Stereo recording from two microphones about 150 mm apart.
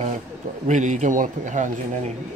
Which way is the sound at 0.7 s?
55° right (ahead or behind).